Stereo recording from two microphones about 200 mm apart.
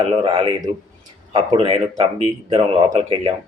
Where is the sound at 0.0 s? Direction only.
30° right (ahead or behind).